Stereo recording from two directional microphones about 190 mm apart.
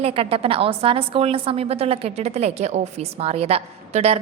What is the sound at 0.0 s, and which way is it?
A woman's voice, 30° right (ahead or behind).